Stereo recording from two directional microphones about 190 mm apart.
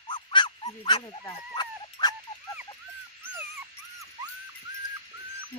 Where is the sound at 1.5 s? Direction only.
20° left (ahead or behind).